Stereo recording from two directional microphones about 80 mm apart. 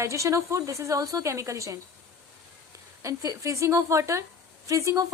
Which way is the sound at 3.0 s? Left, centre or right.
Right.